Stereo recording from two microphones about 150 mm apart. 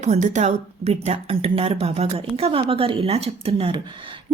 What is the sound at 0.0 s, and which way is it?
Speech, 50° right (ahead or behind).